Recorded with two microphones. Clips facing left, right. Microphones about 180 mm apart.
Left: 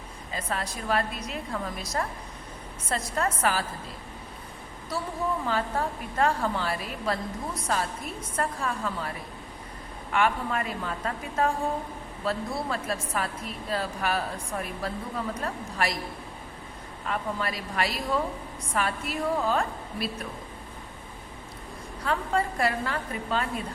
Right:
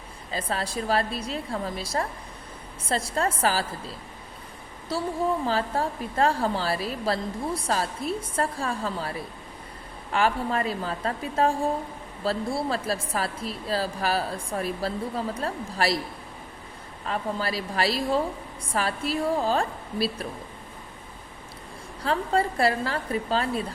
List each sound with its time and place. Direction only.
0.3 s a woman's voice: 30° right (ahead or behind)
5.5 s a woman's voice: 30° right (ahead or behind)
17.1 s a woman's voice: 30° right (ahead or behind)
22.0 s a woman's voice: 30° right (ahead or behind)